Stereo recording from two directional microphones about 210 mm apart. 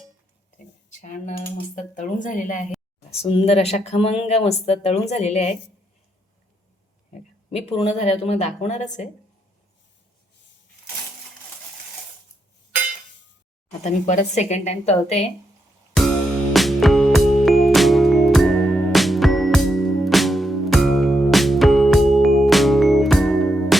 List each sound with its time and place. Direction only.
0.9 s speech: 35° left (ahead or behind)
3.1 s speech: 25° left (ahead or behind)
7.1 s speech: 25° left (ahead or behind)
13.7 s speech: 35° left (ahead or behind)
16.0 s music: centre (ahead or behind)